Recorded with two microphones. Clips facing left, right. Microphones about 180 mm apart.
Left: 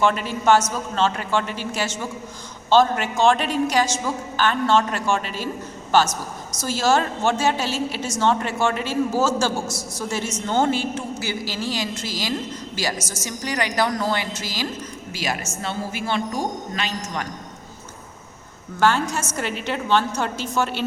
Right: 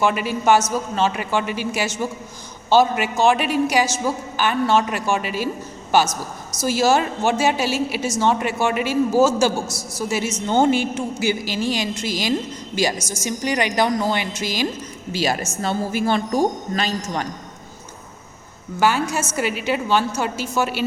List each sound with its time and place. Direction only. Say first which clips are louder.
0.0 s a woman's voice: right 1 dB; 10° right (ahead or behind)
15.1 s a man's voice: right 6 dB; 30° right (ahead or behind)
18.8 s a woman's voice: right 1 dB; 10° right (ahead or behind)